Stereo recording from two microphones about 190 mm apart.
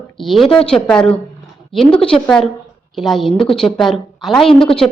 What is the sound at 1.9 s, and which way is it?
Speech, 30° left (ahead or behind).